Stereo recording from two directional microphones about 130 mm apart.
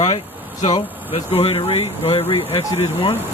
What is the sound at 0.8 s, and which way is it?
Speech, 50° left (ahead or behind).